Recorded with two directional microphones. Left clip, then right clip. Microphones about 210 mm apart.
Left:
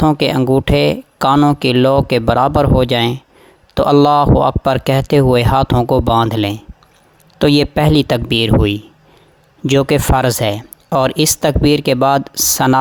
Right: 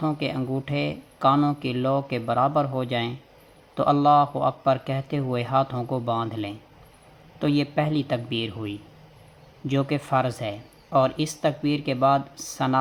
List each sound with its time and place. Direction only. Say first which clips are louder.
0.0 s speech: left 14 dB; 55° left (ahead or behind)